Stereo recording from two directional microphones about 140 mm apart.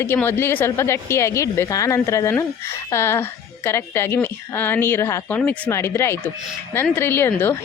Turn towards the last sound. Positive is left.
turn(degrees=15)  # may be behind; listen again after turning